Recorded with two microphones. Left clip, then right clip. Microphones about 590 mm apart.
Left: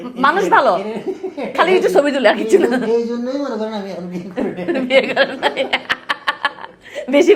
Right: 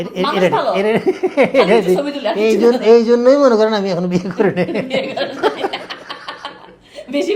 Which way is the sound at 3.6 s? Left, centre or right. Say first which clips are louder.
Right 9 dB; right.